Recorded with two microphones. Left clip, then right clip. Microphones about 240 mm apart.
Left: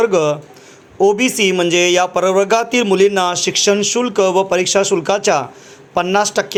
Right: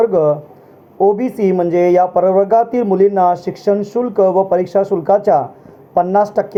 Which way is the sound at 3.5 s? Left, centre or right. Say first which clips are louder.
Left 2 dB; centre.